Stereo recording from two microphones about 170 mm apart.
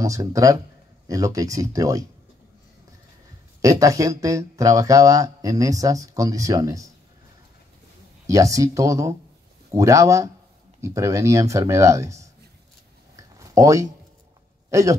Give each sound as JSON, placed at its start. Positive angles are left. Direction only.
{"t": 0.0, "sound": "speech", "side_deg": -20}
{"t": 3.6, "sound": "speech", "side_deg": -20}
{"t": 8.3, "sound": "speech", "side_deg": -20}
{"t": 13.1, "sound": "a sound", "side_deg": -20}
{"t": 14.7, "sound": "speech", "side_deg": -20}